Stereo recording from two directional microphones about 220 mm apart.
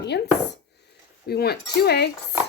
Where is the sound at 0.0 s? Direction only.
50° left (ahead or behind).